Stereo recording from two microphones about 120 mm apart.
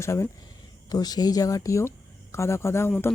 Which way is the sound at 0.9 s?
35° left (ahead or behind).